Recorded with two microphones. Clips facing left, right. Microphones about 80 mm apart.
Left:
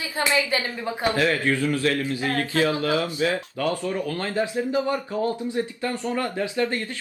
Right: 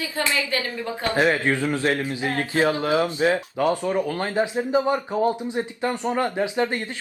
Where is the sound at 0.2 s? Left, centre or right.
Centre.